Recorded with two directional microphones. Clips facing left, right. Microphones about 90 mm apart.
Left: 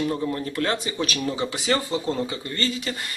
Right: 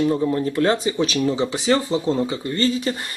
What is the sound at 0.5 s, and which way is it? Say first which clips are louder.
Speech: right 7 dB; 30° right (ahead or behind).